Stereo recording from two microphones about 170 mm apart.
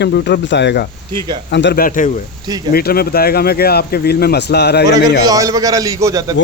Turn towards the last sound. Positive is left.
turn(degrees=-20)  # may be behind; listen again after turning